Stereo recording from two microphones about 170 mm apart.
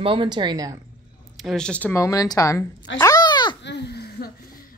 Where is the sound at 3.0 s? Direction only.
20° left (ahead or behind).